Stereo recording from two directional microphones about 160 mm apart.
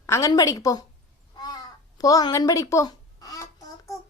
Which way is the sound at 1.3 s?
25° left (ahead or behind).